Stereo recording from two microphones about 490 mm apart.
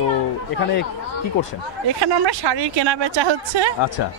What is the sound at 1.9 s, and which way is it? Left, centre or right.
Speech, right.